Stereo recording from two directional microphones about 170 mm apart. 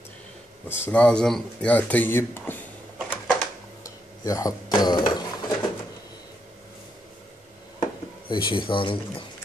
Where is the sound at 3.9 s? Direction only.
20° left (ahead or behind).